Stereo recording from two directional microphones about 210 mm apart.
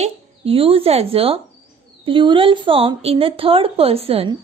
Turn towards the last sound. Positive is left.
turn(degrees=-25)  # may be behind; listen again after turning